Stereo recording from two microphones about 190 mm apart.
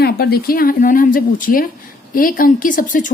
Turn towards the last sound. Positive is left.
turn(degrees=45)  # may be behind; listen again after turning